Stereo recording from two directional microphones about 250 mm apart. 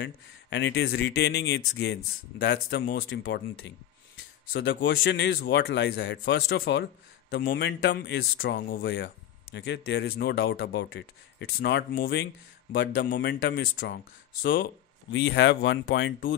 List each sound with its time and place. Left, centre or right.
0.0 s a man's voice: left